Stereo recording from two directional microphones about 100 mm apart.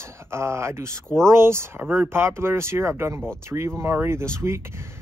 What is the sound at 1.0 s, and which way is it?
Speech, 5° left (ahead or behind).